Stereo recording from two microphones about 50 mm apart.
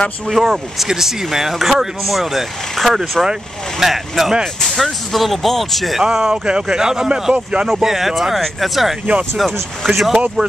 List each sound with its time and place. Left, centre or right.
0.3 s speech: centre
4.6 s speech: centre
5.9 s speech: centre